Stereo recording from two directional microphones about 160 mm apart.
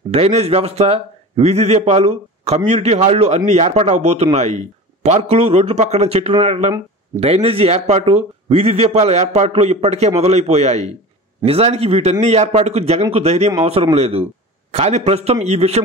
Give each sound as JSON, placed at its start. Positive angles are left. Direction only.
{"t": 0.1, "sound": "a man's voice", "side_deg": -40}